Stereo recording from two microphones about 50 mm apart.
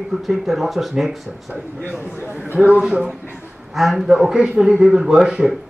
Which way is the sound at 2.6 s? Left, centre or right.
Centre.